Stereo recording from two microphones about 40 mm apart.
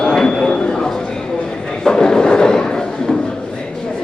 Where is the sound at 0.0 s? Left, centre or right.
Centre.